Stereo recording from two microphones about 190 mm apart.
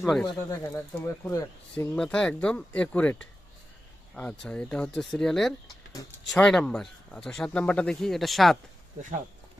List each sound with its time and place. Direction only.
0.0 s speech: centre (ahead or behind)
0.6 s speech: 15° left (ahead or behind)
1.7 s speech: 5° left (ahead or behind)
5.6 s a sound: 20° left (ahead or behind)
6.3 s speech: 5° left (ahead or behind)
9.0 s speech: 40° right (ahead or behind)